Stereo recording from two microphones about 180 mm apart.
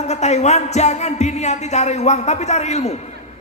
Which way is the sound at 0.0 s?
40° left (ahead or behind).